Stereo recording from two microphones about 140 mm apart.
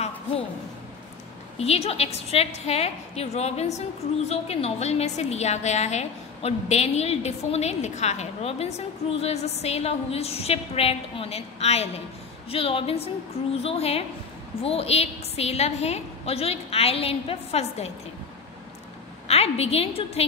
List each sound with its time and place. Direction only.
1.6 s a woman's voice: 45° left (ahead or behind)
19.2 s a woman's voice: 45° left (ahead or behind)